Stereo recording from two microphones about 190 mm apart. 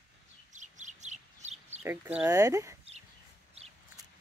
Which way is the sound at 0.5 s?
40° right (ahead or behind).